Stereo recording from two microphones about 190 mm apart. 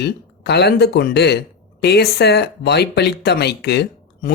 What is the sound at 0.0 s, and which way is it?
Speech, 60° left (ahead or behind).